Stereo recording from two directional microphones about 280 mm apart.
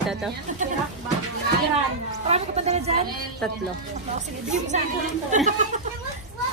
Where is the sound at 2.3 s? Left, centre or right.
Right.